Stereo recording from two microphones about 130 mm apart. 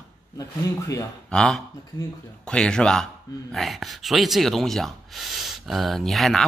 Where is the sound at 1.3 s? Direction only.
5° left (ahead or behind).